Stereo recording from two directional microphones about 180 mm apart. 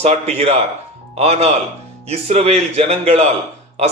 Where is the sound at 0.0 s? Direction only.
35° right (ahead or behind).